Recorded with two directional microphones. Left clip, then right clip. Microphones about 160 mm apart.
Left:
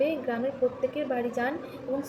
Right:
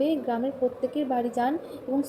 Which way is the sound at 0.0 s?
20° right (ahead or behind).